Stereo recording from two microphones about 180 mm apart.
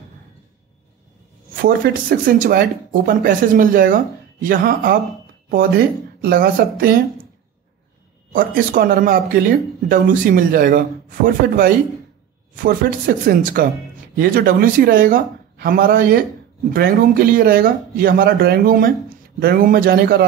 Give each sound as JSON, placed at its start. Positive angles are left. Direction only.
{"t": 1.5, "sound": "speech", "side_deg": -55}
{"t": 6.2, "sound": "speech", "side_deg": -55}
{"t": 8.3, "sound": "speech", "side_deg": -50}